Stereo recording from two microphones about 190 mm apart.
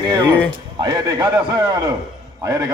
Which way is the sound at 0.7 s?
25° right (ahead or behind).